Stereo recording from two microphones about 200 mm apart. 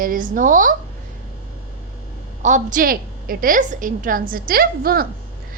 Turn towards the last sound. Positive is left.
turn(degrees=-45)  # may be behind; listen again after turning